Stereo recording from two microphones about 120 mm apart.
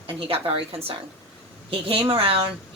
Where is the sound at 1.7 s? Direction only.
50° right (ahead or behind).